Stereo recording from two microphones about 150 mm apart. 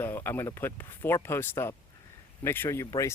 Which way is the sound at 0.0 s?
15° left (ahead or behind).